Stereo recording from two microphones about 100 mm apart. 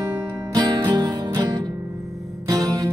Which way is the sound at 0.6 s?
45° right (ahead or behind).